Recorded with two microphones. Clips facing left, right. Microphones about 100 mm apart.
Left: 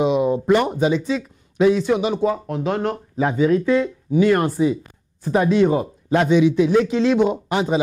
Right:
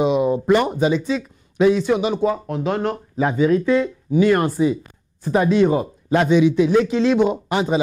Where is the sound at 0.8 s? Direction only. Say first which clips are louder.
Even; 15° right (ahead or behind).